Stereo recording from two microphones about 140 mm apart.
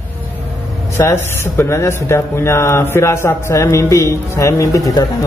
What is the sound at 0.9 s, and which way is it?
Speech, 20° left (ahead or behind).